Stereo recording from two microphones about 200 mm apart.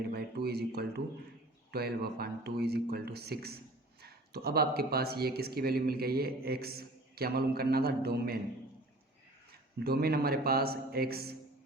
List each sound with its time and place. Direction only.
0.1 s speech: 50° right (ahead or behind)
9.8 s speech: 50° right (ahead or behind)